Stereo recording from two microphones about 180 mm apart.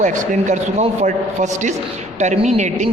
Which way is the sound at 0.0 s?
40° right (ahead or behind).